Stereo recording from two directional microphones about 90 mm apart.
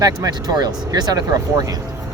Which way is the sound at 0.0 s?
45° right (ahead or behind).